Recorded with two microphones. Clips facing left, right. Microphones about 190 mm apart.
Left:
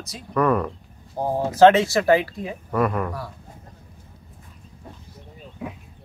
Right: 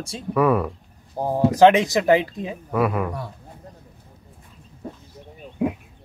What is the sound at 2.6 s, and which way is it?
Speech, 5° right (ahead or behind).